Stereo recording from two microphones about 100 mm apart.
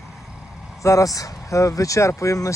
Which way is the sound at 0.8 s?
30° left (ahead or behind).